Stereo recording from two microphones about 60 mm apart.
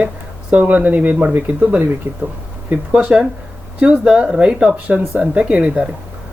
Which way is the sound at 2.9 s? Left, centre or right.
Centre.